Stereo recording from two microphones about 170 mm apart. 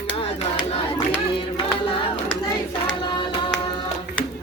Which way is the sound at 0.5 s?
30° left (ahead or behind).